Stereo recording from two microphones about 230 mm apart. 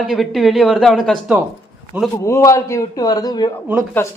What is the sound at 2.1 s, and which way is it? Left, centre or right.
Speech, centre.